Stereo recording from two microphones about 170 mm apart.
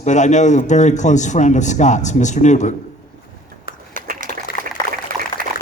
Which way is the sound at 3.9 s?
50° right (ahead or behind).